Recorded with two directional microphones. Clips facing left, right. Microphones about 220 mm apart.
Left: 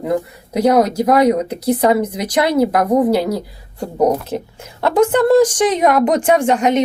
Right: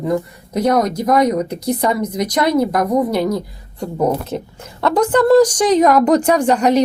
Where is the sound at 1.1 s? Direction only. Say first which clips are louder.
Left 2 dB; 30° left (ahead or behind).